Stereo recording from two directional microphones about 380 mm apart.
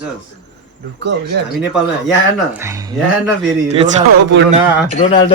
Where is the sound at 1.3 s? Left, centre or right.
Right.